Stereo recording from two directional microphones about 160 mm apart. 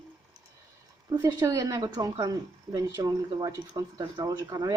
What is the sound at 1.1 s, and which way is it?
Speech, 20° right (ahead or behind).